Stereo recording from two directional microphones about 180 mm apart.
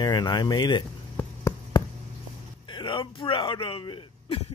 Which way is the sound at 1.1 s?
15° left (ahead or behind).